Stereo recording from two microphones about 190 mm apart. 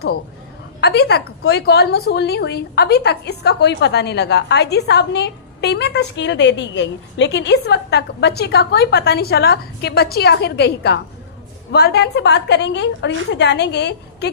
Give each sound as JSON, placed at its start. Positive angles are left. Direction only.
{"t": 0.8, "sound": "a woman's voice", "side_deg": 60}